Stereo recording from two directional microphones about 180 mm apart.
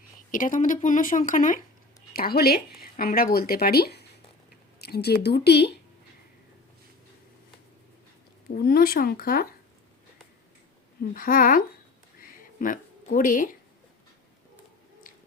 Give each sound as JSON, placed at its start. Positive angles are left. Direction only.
{"t": 0.3, "sound": "speech", "side_deg": 45}
{"t": 2.1, "sound": "speech", "side_deg": 60}
{"t": 8.5, "sound": "speech", "side_deg": 60}
{"t": 11.1, "sound": "speech", "side_deg": 50}
{"t": 12.2, "sound": "a sound", "side_deg": 50}